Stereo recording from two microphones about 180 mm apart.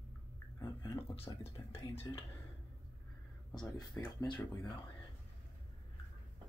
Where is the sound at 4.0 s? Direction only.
10° left (ahead or behind).